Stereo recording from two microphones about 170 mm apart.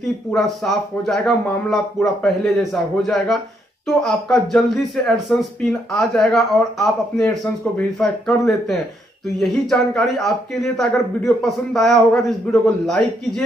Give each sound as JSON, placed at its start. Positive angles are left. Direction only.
{"t": 0.0, "sound": "speech", "side_deg": 0}